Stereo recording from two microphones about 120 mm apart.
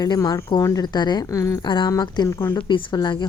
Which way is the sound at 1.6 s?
40° left (ahead or behind).